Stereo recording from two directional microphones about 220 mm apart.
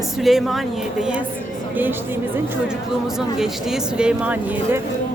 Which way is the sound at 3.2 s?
Centre (ahead or behind).